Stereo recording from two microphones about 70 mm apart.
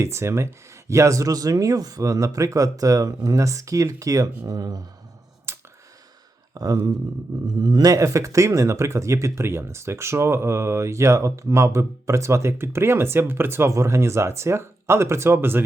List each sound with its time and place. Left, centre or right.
0.0 s speech: right
5.5 s clicking: right
6.5 s speech: right
7.6 s speech: right
7.9 s speech: right